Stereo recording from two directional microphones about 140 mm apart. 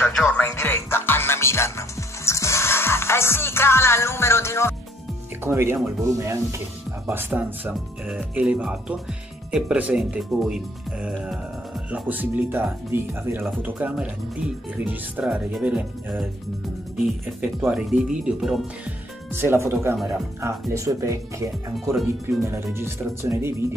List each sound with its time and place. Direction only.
0.0 s music: 5° left (ahead or behind)
0.5 s music: 15° left (ahead or behind)
5.4 s speech: 15° right (ahead or behind)
19.3 s speech: 15° right (ahead or behind)